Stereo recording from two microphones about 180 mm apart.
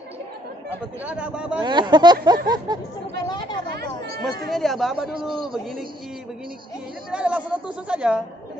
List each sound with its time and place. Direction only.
1.0 s speech: 5° right (ahead or behind)
1.6 s speech: 25° right (ahead or behind)
3.3 s speech: 25° left (ahead or behind)
3.7 s chatter: 60° right (ahead or behind)
4.2 s speech: centre (ahead or behind)
7.1 s speech: 5° right (ahead or behind)